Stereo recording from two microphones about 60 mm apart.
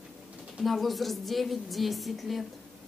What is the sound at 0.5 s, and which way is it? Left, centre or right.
A woman's voice, centre.